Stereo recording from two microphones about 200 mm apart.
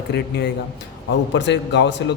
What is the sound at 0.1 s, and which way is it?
A man's voice, 55° left (ahead or behind).